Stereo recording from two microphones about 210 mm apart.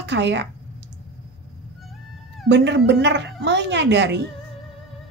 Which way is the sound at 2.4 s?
55° right (ahead or behind).